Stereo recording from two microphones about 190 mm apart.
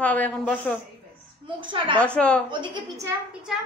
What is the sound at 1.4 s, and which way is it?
Speech, 25° right (ahead or behind).